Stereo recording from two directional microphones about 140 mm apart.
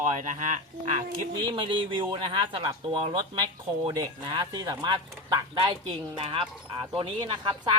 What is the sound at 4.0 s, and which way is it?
Speech, 30° right (ahead or behind).